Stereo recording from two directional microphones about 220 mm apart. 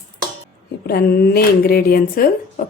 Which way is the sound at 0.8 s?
45° left (ahead or behind).